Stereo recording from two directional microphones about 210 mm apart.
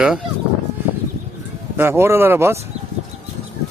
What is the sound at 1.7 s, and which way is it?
Speech, 10° right (ahead or behind).